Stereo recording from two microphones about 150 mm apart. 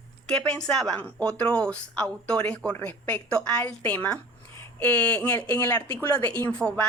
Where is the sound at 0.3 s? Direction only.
5° left (ahead or behind).